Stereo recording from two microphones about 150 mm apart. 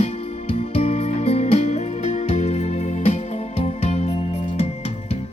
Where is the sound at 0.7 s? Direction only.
40° left (ahead or behind).